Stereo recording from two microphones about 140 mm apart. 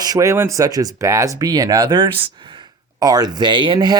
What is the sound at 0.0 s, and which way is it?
Speech, 25° right (ahead or behind).